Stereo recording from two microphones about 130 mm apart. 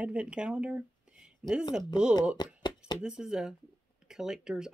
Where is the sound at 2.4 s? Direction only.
35° left (ahead or behind).